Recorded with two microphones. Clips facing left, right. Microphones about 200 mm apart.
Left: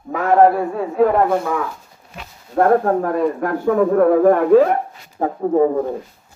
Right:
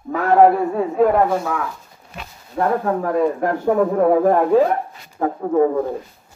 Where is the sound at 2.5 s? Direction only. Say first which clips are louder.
Left 5 dB; 55° left (ahead or behind).